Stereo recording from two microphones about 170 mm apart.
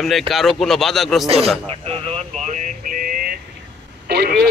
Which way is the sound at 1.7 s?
35° right (ahead or behind).